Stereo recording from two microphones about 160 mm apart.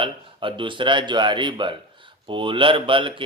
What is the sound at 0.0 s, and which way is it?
Speech, 35° right (ahead or behind).